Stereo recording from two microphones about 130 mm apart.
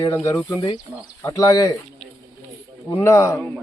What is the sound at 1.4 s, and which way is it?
Speech, 25° left (ahead or behind).